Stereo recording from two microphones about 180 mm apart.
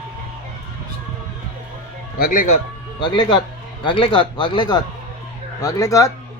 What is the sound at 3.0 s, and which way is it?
Speech, 25° left (ahead or behind).